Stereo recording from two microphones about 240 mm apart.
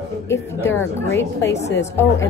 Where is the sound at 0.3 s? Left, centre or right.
Centre.